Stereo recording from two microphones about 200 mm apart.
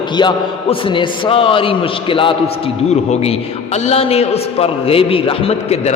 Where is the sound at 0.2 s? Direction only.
25° left (ahead or behind).